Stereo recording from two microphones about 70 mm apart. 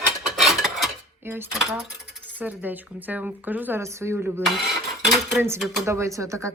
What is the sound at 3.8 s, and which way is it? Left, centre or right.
Speech, right.